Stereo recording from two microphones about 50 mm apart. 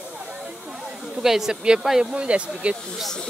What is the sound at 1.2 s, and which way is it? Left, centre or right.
Speech, centre.